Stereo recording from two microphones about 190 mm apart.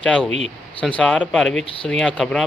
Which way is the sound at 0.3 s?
35° right (ahead or behind).